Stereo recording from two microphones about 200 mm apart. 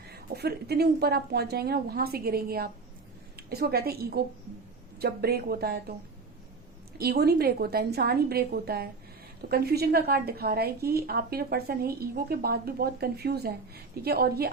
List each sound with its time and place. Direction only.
0.1 s a woman's voice: 55° right (ahead or behind)
7.0 s a woman's voice: 50° right (ahead or behind)